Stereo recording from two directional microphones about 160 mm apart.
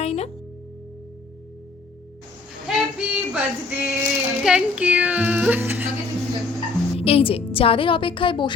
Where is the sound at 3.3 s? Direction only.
10° right (ahead or behind).